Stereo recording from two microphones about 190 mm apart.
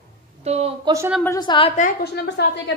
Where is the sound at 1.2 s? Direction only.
20° left (ahead or behind).